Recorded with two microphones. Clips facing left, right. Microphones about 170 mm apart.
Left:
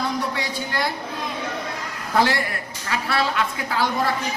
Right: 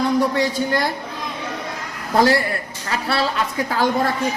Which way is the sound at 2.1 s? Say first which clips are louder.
Right 4 dB; 35° right (ahead or behind).